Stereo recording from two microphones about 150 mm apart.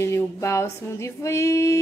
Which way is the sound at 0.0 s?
20° left (ahead or behind).